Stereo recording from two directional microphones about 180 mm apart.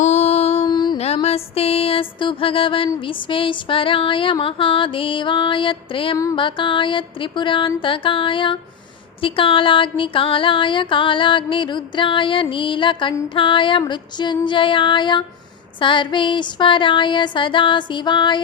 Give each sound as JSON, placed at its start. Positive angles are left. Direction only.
{"t": 0.0, "sound": "music", "side_deg": 35}